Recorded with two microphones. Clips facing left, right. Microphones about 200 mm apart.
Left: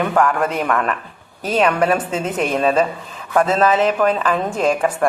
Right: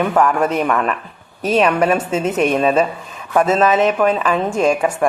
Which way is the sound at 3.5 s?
30° left (ahead or behind).